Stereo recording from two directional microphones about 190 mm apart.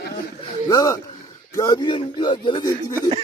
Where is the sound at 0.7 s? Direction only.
20° left (ahead or behind).